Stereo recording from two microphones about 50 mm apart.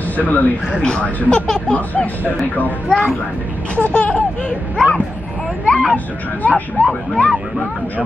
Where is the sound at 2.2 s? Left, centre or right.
Left.